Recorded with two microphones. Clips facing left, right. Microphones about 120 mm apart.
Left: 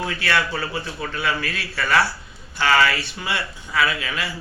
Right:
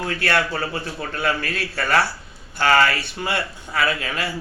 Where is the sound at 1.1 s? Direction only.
45° right (ahead or behind).